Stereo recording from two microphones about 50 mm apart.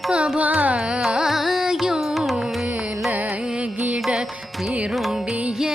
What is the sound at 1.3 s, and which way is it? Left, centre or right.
Carnatic music, centre.